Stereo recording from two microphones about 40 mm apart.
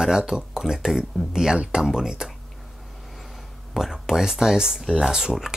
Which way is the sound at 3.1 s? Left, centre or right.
Centre.